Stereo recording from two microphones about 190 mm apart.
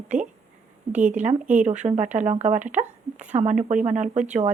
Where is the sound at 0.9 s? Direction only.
10° right (ahead or behind).